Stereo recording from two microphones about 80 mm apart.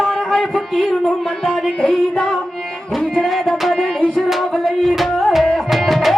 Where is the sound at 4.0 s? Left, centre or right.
Centre.